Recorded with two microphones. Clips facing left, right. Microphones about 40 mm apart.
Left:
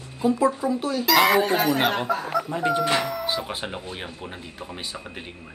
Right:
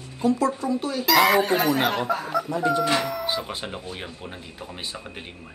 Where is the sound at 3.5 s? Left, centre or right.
Centre.